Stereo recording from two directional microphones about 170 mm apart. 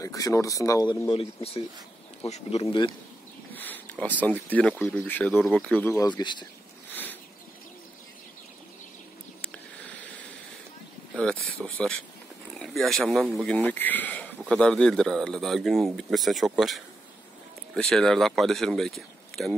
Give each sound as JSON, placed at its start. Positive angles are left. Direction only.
{"t": 0.0, "sound": "speech", "side_deg": 20}
{"t": 2.6, "sound": "speech", "side_deg": 30}
{"t": 3.5, "sound": "speech", "side_deg": 10}
{"t": 6.0, "sound": "speech", "side_deg": 25}
{"t": 6.9, "sound": "a sound", "side_deg": 10}
{"t": 9.4, "sound": "a sound", "side_deg": 5}
{"t": 11.1, "sound": "speech", "side_deg": 5}
{"t": 13.6, "sound": "speech", "side_deg": 10}